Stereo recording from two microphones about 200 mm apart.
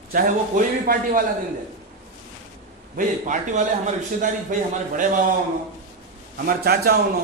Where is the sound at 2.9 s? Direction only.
40° right (ahead or behind).